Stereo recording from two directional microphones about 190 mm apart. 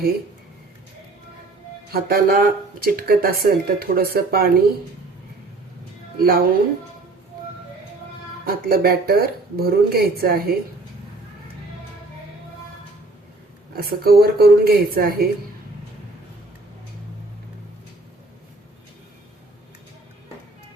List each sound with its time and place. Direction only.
1.9 s speech: 50° right (ahead or behind)
6.1 s speech: 50° right (ahead or behind)
8.4 s speech: 50° right (ahead or behind)
13.7 s speech: 55° right (ahead or behind)